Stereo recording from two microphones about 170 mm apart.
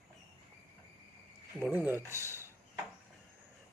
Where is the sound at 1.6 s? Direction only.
10° right (ahead or behind).